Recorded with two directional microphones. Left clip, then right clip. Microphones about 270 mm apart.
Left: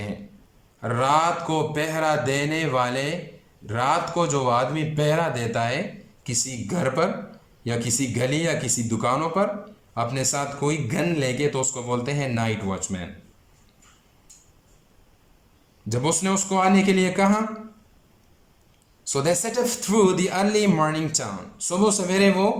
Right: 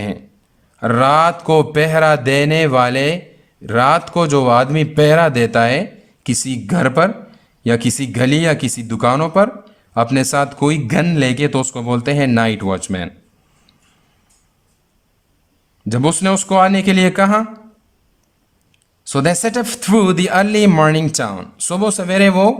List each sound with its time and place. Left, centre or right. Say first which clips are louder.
0.8 s speech: right 9 dB; right
15.9 s speech: right 8 dB; right
19.0 s speech: right 7 dB; right